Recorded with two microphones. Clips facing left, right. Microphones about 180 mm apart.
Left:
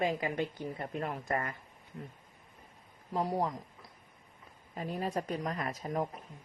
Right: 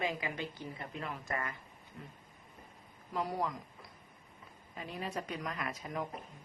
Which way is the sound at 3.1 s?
30° left (ahead or behind).